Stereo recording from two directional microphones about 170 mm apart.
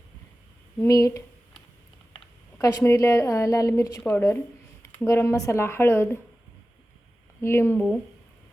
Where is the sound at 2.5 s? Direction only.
15° left (ahead or behind).